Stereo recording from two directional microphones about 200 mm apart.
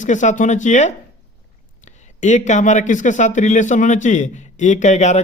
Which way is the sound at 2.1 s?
35° left (ahead or behind).